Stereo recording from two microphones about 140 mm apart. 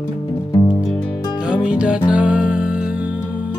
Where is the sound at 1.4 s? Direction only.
10° right (ahead or behind).